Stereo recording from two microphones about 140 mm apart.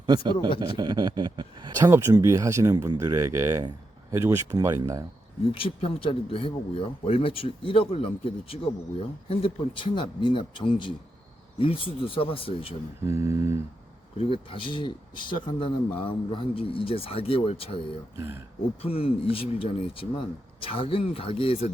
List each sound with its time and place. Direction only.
0.0 s speech: 30° right (ahead or behind)
1.9 s speech: 20° right (ahead or behind)
5.5 s speech: 40° left (ahead or behind)
13.1 s speech: 20° right (ahead or behind)
14.5 s speech: 35° left (ahead or behind)
18.2 s speech: 15° right (ahead or behind)
18.8 s speech: 45° left (ahead or behind)